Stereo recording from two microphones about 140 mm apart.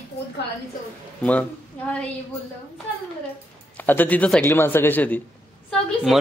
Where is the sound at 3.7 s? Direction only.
10° left (ahead or behind).